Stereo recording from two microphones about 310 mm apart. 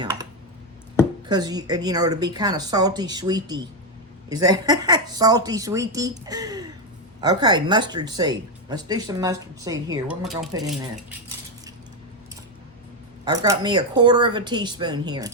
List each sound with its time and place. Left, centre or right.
0.0 s clicking: centre
1.3 s speech: centre
13.2 s speech: centre